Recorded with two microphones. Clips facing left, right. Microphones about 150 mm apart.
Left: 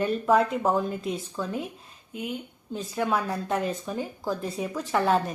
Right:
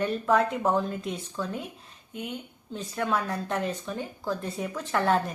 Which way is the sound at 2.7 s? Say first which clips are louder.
Left 2 dB; 5° left (ahead or behind).